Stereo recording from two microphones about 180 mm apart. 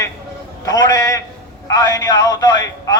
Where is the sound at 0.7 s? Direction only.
20° left (ahead or behind).